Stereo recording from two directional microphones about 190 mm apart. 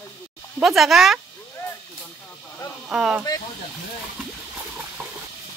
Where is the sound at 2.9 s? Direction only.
5° right (ahead or behind).